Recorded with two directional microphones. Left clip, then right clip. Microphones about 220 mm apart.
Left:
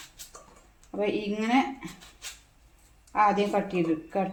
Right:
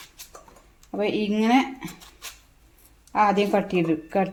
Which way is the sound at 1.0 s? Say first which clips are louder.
Right 4 dB; 45° right (ahead or behind).